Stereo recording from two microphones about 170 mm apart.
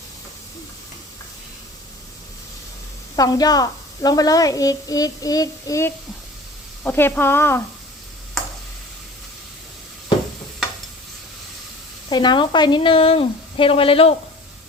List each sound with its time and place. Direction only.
3.2 s a woman's voice: 20° left (ahead or behind)
12.0 s speech: 25° left (ahead or behind)